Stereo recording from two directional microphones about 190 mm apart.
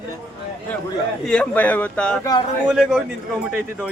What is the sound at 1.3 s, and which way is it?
A man's voice, 5° left (ahead or behind).